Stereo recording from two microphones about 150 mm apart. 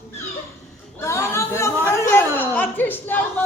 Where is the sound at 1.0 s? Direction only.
20° left (ahead or behind).